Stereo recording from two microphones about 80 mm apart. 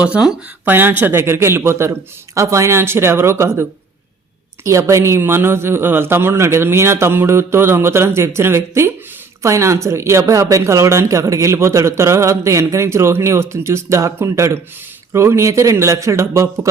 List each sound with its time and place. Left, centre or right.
0.0 s speech: centre
0.6 s a man's voice: right